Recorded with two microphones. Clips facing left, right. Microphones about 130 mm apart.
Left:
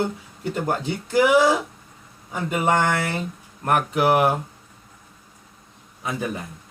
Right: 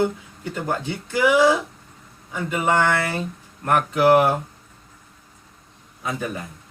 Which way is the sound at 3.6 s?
20° left (ahead or behind).